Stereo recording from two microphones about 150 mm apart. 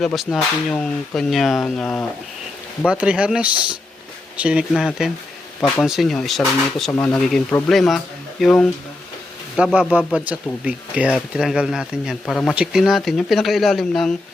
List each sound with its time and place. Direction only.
0.0 s speech: centre (ahead or behind)
2.8 s speech: 5° right (ahead or behind)
5.5 s speech: 10° left (ahead or behind)
5.8 s speech: centre (ahead or behind)
10.1 s speech: 5° right (ahead or behind)